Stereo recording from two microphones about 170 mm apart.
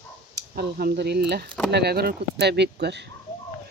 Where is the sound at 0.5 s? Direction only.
65° right (ahead or behind).